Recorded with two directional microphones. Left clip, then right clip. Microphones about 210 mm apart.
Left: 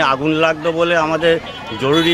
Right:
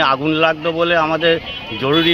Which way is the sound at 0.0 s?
15° left (ahead or behind).